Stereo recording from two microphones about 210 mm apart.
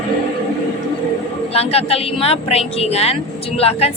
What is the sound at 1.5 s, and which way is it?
A woman's voice, 30° left (ahead or behind).